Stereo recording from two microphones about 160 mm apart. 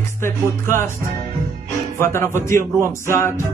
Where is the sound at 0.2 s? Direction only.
15° left (ahead or behind).